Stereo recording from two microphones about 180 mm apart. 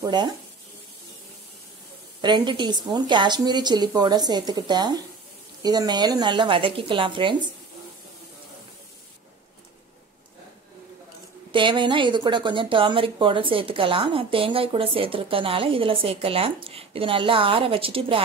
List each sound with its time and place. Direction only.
0.0 s a woman's voice: 25° right (ahead or behind)
2.2 s a woman's voice: 25° right (ahead or behind)
11.5 s a woman's voice: 25° right (ahead or behind)